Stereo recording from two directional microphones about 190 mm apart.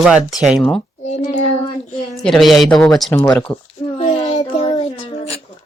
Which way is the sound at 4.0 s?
35° left (ahead or behind).